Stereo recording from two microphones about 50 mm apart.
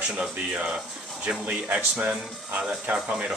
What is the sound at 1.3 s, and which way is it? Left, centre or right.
Speech, right.